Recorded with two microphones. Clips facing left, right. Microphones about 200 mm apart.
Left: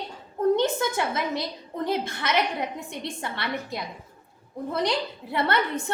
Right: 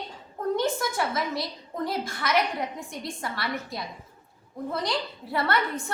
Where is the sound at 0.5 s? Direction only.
25° left (ahead or behind).